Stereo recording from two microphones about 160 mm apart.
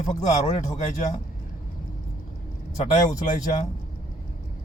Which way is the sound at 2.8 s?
50° left (ahead or behind).